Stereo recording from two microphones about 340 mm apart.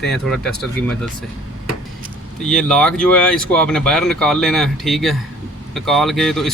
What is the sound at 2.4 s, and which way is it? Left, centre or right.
Speech, centre.